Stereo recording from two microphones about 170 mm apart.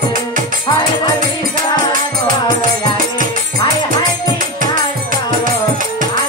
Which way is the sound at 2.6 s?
50° right (ahead or behind).